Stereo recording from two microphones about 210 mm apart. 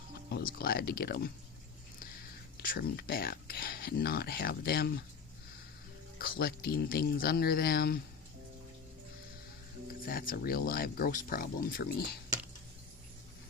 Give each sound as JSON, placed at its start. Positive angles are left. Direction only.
{"t": 0.3, "sound": "speech", "side_deg": 45}
{"t": 2.6, "sound": "speech", "side_deg": 45}
{"t": 6.1, "sound": "speech", "side_deg": 45}
{"t": 10.0, "sound": "speech", "side_deg": 45}